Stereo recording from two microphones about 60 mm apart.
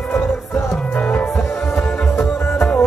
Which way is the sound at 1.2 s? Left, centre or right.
Left.